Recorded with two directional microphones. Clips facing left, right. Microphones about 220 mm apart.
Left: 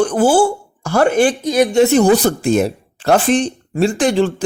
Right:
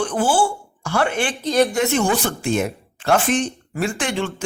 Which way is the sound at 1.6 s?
30° left (ahead or behind).